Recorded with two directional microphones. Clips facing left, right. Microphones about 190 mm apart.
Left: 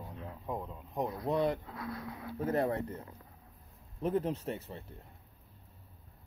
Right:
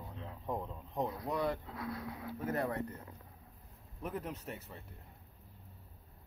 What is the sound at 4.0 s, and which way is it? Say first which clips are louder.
Speech: left 9 dB; 30° left (ahead or behind).